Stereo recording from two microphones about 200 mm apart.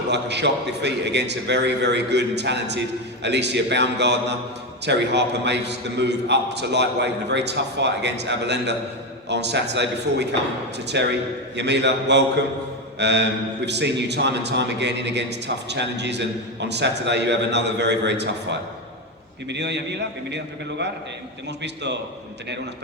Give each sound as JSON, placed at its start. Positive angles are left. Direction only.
{"t": 0.1, "sound": "a man's voice", "side_deg": -60}
{"t": 19.5, "sound": "a man's voice", "side_deg": -60}